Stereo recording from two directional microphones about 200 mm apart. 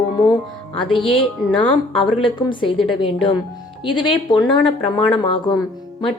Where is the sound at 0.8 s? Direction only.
25° left (ahead or behind).